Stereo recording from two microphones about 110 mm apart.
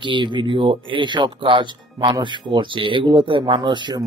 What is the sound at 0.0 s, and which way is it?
Speech, 45° right (ahead or behind).